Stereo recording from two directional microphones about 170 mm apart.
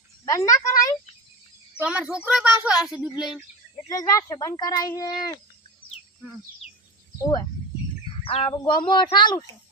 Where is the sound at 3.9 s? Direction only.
20° left (ahead or behind).